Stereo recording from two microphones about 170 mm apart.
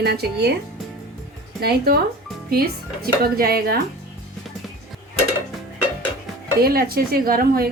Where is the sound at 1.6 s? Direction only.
65° right (ahead or behind).